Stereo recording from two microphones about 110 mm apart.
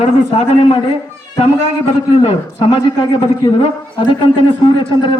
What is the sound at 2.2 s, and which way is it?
A man's voice, 65° left (ahead or behind).